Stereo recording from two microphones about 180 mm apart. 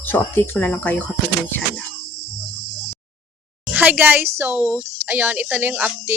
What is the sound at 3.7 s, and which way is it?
Speech, 10° right (ahead or behind).